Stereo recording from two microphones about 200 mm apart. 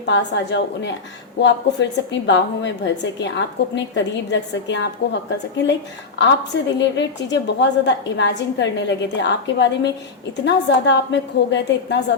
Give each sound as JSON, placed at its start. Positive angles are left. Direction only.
{"t": 0.0, "sound": "a woman's voice", "side_deg": 60}